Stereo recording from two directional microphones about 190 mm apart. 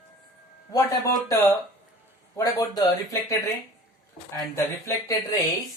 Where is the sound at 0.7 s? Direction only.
20° left (ahead or behind).